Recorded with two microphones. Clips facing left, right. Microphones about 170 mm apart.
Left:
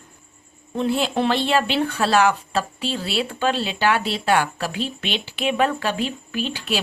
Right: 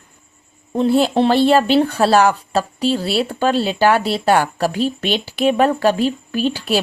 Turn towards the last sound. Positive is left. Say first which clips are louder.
# right 7 dB
turn(degrees=-40)  # may be behind; listen again after turning